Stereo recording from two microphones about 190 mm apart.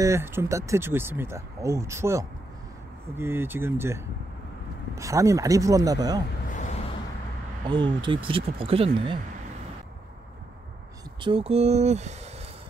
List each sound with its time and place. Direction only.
0.0 s speech: 15° right (ahead or behind)
6.5 s a sound: 40° left (ahead or behind)
7.6 s speech: 25° right (ahead or behind)
11.1 s speech: 25° right (ahead or behind)